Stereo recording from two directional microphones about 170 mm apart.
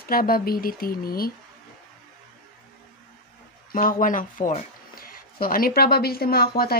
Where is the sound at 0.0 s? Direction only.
60° left (ahead or behind).